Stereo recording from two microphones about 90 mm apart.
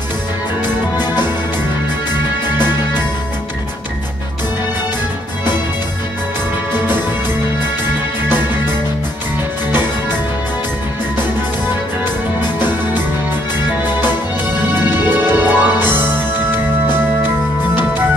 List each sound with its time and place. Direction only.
0.9 s music: 50° left (ahead or behind)
2.4 s music: 50° left (ahead or behind)
14.9 s music: 20° right (ahead or behind)